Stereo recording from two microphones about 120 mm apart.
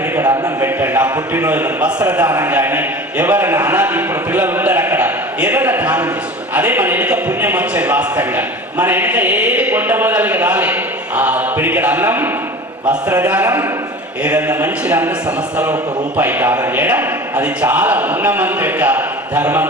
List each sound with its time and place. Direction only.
0.2 s a sound: 25° right (ahead or behind)
1.3 s a man's voice: 15° right (ahead or behind)
2.2 s a man's voice: 30° right (ahead or behind)
2.5 s a man's voice: 15° right (ahead or behind)
12.8 s a man's voice: 30° right (ahead or behind)
13.2 s a man's voice: 15° right (ahead or behind)
16.1 s a man's voice: 15° right (ahead or behind)